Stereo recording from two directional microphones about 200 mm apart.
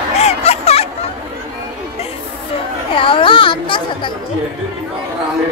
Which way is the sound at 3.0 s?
25° left (ahead or behind).